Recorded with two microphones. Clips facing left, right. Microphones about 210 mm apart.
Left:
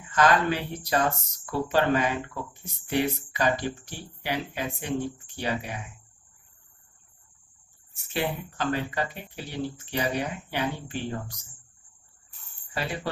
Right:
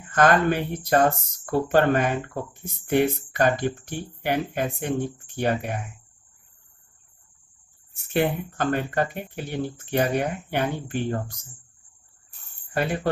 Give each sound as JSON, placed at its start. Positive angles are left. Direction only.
{"t": 0.1, "sound": "speech", "side_deg": -55}
{"t": 7.9, "sound": "speech", "side_deg": -55}
{"t": 12.7, "sound": "speech", "side_deg": -55}